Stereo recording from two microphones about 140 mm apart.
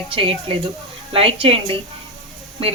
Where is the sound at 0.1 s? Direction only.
40° right (ahead or behind).